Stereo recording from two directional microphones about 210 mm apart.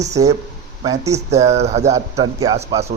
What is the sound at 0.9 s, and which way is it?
Speech, 15° right (ahead or behind).